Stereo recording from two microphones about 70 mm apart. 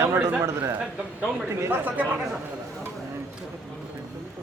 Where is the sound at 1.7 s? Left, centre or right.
Right.